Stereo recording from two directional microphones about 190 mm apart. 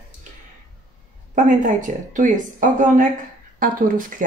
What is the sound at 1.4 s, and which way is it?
Speech, 40° right (ahead or behind).